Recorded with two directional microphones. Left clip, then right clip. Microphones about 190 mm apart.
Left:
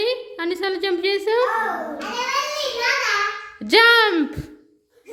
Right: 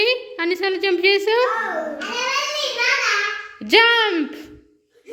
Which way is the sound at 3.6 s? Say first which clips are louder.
Left 1 dB; 10° left (ahead or behind).